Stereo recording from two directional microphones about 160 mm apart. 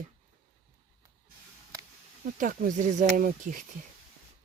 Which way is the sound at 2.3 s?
55° right (ahead or behind).